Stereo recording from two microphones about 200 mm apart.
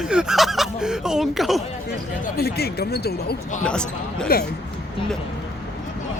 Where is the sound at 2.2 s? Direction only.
50° left (ahead or behind).